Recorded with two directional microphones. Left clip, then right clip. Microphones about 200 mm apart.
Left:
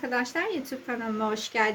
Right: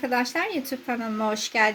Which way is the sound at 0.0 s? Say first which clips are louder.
Right 3 dB; 30° right (ahead or behind).